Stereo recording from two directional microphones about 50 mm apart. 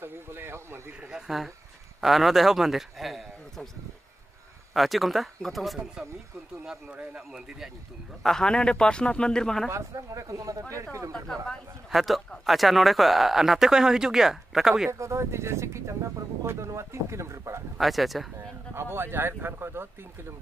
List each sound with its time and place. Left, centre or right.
0.0 s a sound: right
1.1 s a sound: centre
2.0 s a man's voice: centre
4.7 s speech: centre
6.0 s a man's voice: centre
8.2 s a man's voice: centre
9.7 s speech: right
10.7 s speech: right
11.2 s a man's voice: centre
11.9 s a man's voice: centre
14.9 s speech: right
17.7 s speech: centre
18.8 s speech: right